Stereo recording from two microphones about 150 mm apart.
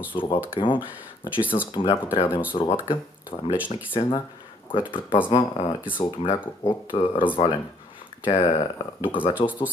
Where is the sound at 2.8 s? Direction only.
30° left (ahead or behind).